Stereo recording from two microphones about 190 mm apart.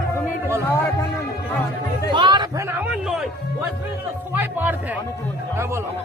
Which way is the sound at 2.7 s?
5° right (ahead or behind).